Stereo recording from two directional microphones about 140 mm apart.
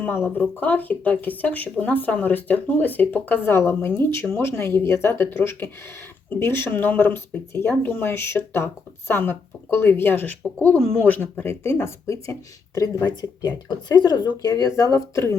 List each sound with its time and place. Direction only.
0.0 s speech: 15° left (ahead or behind)